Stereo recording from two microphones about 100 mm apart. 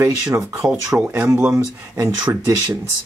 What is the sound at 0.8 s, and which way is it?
Speech, 15° right (ahead or behind).